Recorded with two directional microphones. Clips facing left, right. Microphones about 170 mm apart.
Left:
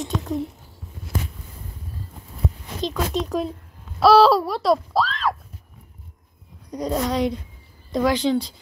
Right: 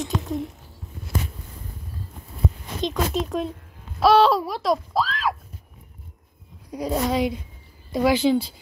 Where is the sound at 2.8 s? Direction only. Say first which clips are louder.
Even; centre (ahead or behind).